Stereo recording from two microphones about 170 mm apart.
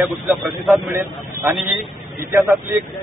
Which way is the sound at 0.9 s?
15° right (ahead or behind).